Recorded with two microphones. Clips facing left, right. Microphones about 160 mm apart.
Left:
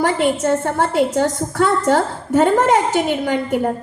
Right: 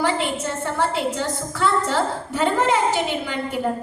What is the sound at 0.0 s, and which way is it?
A woman's voice, 50° left (ahead or behind).